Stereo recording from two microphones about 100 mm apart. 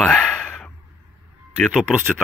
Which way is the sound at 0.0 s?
5° left (ahead or behind).